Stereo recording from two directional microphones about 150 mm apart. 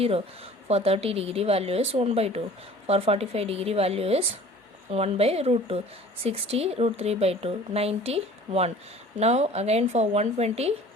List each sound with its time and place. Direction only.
0.7 s a woman's voice: 40° right (ahead or behind)